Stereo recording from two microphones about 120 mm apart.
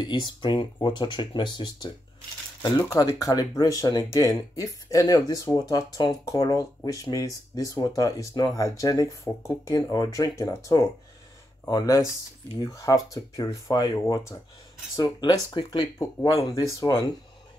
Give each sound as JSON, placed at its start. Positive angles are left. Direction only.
{"t": 0.0, "sound": "speech", "side_deg": 40}
{"t": 2.8, "sound": "speech", "side_deg": 30}
{"t": 15.0, "sound": "speech", "side_deg": 40}
{"t": 16.0, "sound": "speech", "side_deg": 25}